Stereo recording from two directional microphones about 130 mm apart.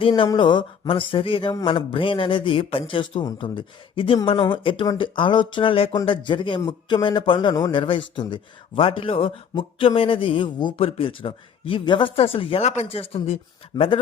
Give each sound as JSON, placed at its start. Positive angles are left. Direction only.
{"t": 0.1, "sound": "a man's voice", "side_deg": 35}